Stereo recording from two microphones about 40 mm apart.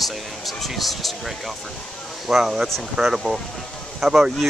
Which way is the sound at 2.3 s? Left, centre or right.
Centre.